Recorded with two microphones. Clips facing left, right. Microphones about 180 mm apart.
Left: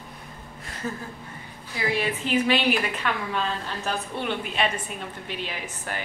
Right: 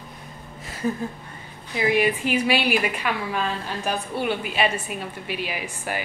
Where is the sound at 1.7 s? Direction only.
15° right (ahead or behind).